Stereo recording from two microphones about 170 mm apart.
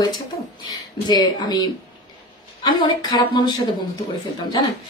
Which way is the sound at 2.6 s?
25° left (ahead or behind).